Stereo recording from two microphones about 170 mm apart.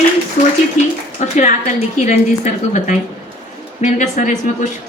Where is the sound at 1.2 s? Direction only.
45° left (ahead or behind).